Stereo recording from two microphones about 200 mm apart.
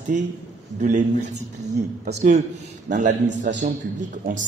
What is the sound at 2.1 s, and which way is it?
Speech, 35° right (ahead or behind).